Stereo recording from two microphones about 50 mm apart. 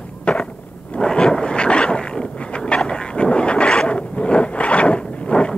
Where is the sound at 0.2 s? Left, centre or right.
Left.